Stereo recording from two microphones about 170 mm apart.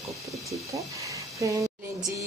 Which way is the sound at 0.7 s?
20° right (ahead or behind).